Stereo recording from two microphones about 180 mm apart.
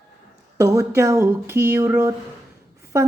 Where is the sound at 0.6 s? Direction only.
20° right (ahead or behind).